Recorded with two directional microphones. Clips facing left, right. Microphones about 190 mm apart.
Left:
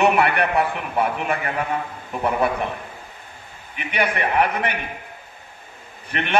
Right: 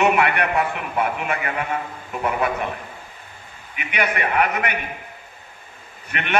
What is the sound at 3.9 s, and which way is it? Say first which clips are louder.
Speech: left 1 dB; 30° left (ahead or behind).